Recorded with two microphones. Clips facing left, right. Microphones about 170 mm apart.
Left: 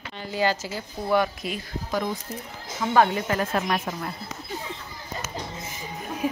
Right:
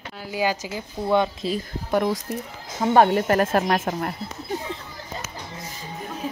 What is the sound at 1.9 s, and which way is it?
Speech, 70° right (ahead or behind).